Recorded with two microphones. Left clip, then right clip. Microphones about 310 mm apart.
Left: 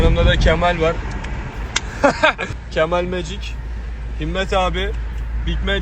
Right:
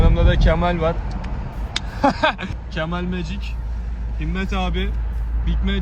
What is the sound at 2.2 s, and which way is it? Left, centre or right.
A man's voice, centre.